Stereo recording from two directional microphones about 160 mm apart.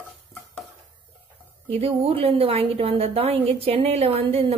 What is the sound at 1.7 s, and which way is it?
A woman's voice, 35° right (ahead or behind).